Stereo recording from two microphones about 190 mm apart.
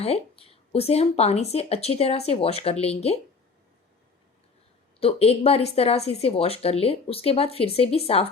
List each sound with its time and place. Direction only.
0.0 s speech: 30° left (ahead or behind)
4.9 s speech: 30° left (ahead or behind)